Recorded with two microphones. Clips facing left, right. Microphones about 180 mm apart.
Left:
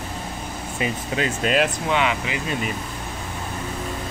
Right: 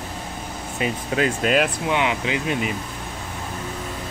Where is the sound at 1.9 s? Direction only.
15° right (ahead or behind).